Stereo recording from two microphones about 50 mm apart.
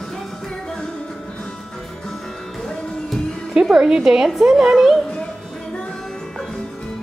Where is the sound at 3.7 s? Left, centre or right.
Centre.